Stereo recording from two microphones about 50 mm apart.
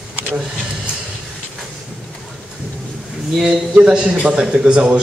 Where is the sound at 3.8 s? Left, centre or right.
Right.